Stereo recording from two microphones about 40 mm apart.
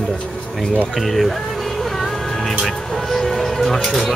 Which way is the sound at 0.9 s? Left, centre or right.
Centre.